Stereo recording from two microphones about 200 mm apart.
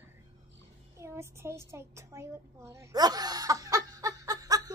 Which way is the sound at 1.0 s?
15° right (ahead or behind).